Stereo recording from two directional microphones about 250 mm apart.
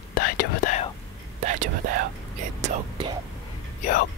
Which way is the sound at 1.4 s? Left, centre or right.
Right.